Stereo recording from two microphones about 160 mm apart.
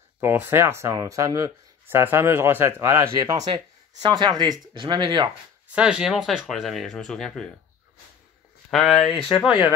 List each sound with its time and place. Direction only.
0.2 s speech: 15° right (ahead or behind)
5.7 s speech: 5° right (ahead or behind)
8.6 s speech: 5° left (ahead or behind)